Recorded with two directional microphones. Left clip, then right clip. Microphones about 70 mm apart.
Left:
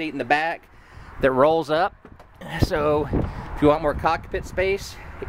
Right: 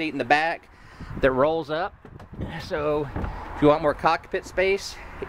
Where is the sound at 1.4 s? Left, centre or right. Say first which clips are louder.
Left 5 dB; left.